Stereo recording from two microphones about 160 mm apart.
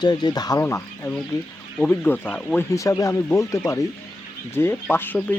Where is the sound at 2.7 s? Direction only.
20° left (ahead or behind).